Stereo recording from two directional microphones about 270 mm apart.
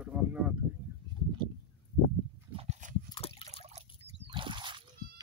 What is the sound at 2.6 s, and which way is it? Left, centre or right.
Horse, right.